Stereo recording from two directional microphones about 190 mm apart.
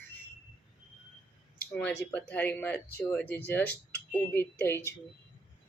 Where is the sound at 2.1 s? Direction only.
10° left (ahead or behind).